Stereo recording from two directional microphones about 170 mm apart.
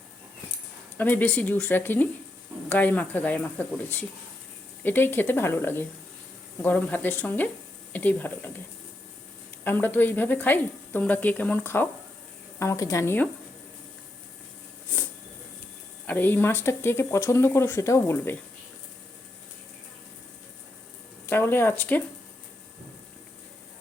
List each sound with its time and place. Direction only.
0.9 s speech: 10° left (ahead or behind)
9.6 s speech: 10° left (ahead or behind)
16.0 s speech: 10° left (ahead or behind)
21.2 s speech: 10° left (ahead or behind)